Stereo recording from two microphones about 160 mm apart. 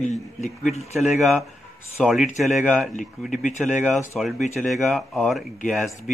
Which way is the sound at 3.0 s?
50° left (ahead or behind).